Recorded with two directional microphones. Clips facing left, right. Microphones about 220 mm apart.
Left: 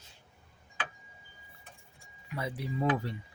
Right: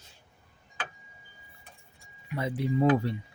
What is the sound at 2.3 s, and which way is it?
Speech, 25° right (ahead or behind).